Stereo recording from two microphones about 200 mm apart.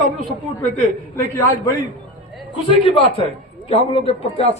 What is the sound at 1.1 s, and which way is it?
Speech, 15° left (ahead or behind).